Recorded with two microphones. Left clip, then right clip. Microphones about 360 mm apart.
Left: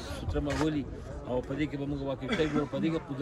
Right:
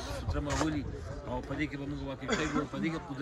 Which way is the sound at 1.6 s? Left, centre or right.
Centre.